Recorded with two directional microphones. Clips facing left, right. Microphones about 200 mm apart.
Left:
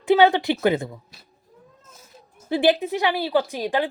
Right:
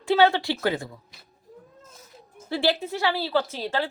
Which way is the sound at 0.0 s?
15° left (ahead or behind).